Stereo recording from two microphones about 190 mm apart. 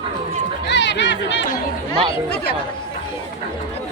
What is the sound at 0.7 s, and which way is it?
Chatter, 65° left (ahead or behind).